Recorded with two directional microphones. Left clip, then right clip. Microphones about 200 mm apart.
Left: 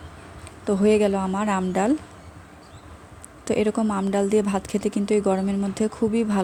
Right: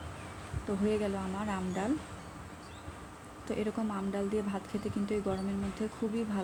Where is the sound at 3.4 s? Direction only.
65° left (ahead or behind).